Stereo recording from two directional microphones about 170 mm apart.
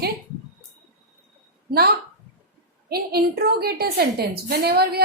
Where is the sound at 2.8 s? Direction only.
65° right (ahead or behind).